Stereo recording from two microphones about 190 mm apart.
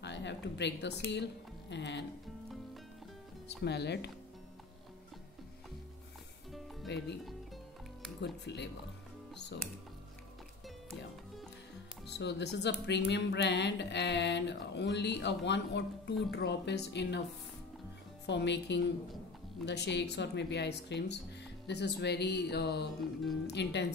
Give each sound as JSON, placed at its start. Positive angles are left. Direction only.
{"t": 0.0, "sound": "a woman's voice", "side_deg": 65}
{"t": 3.4, "sound": "speech", "side_deg": 60}
{"t": 6.9, "sound": "a woman's voice", "side_deg": 65}
{"t": 8.5, "sound": "a woman's voice", "side_deg": 65}
{"t": 12.1, "sound": "speech", "side_deg": 65}
{"t": 18.2, "sound": "a woman's voice", "side_deg": 65}